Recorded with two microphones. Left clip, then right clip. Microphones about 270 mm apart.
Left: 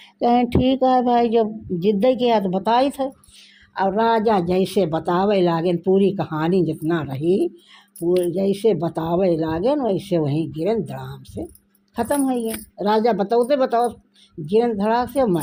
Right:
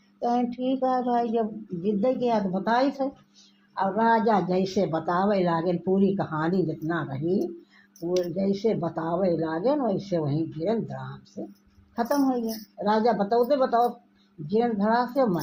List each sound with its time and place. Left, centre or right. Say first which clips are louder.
0.2 s speech: left 8 dB; left
12.8 s speech: left 5 dB; left